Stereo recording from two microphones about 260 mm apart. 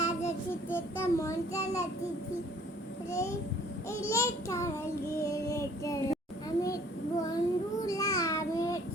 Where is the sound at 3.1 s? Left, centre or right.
Centre.